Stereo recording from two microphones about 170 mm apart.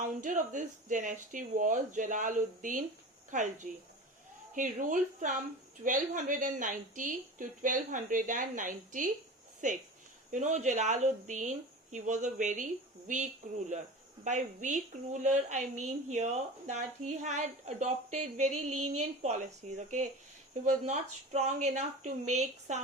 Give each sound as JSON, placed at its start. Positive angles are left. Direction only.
{"t": 0.2, "sound": "a woman's voice", "side_deg": -50}
{"t": 10.3, "sound": "a woman's voice", "side_deg": -45}